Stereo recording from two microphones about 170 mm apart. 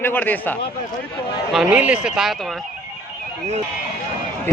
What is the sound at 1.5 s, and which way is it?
A man's voice, 5° right (ahead or behind).